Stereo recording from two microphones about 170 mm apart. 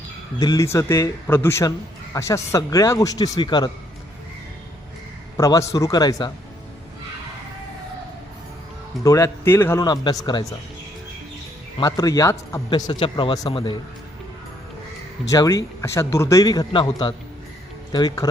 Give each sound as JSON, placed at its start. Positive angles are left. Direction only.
{"t": 0.3, "sound": "speech", "side_deg": 20}
{"t": 5.4, "sound": "speech", "side_deg": 20}
{"t": 9.0, "sound": "speech", "side_deg": 20}
{"t": 9.8, "sound": "speech", "side_deg": 25}
{"t": 11.8, "sound": "speech", "side_deg": 20}
{"t": 15.3, "sound": "speech", "side_deg": 20}